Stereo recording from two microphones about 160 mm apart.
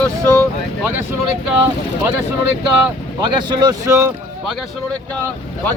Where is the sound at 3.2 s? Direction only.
25° right (ahead or behind).